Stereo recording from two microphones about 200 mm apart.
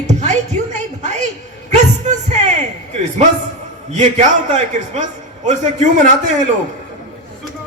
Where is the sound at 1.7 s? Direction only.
35° right (ahead or behind).